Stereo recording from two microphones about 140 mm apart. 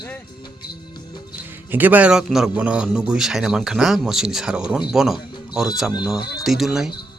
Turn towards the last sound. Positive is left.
turn(degrees=-5)  # may be behind; listen again after turning